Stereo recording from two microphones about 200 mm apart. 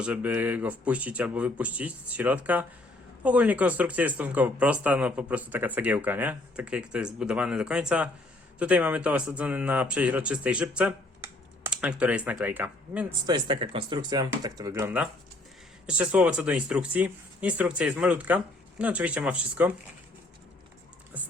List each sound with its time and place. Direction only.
0.0 s speech: 5° right (ahead or behind)
13.2 s speech: 20° right (ahead or behind); by 19.7 s 5° right (ahead or behind)